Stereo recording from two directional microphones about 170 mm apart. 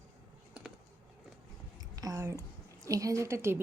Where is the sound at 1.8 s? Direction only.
20° right (ahead or behind).